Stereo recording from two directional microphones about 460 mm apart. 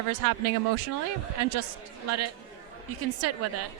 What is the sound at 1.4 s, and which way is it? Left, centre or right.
A woman's voice, right.